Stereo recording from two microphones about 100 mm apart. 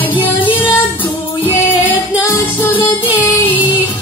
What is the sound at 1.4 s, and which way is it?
Music, 20° left (ahead or behind).